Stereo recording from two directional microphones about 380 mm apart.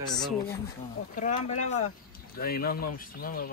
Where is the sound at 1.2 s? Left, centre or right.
Centre.